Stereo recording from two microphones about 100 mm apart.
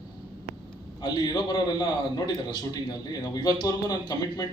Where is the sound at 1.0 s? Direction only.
45° left (ahead or behind).